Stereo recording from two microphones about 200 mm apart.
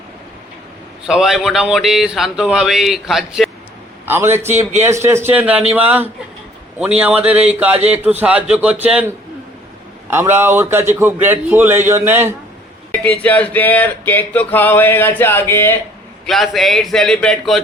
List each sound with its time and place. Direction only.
1.0 s a man's voice: centre (ahead or behind)
4.4 s speech: 35° right (ahead or behind)
4.8 s a man's voice: 15° right (ahead or behind)
10.1 s a man's voice: 10° right (ahead or behind)
13.1 s a sound: 5° left (ahead or behind)
16.2 s speech: centre (ahead or behind)